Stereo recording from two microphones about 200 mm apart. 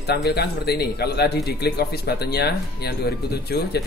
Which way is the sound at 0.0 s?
55° left (ahead or behind).